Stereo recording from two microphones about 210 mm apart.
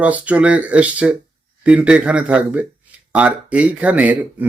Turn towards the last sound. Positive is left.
turn(degrees=-5)  # may be behind; listen again after turning